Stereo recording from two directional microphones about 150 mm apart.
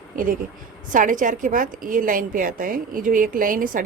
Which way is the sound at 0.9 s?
60° right (ahead or behind).